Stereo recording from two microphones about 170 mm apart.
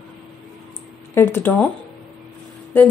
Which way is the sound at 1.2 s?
15° left (ahead or behind).